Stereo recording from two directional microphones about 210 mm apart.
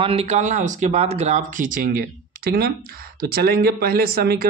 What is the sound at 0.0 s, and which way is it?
Speech, 30° right (ahead or behind).